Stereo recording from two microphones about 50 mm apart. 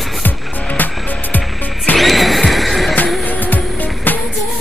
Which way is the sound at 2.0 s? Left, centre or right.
Centre.